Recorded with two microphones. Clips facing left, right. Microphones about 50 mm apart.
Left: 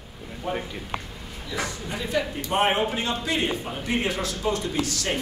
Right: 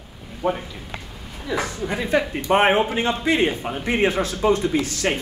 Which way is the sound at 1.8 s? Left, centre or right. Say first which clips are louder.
Right 7 dB; right.